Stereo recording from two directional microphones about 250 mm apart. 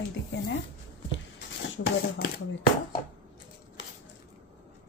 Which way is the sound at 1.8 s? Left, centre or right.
Left.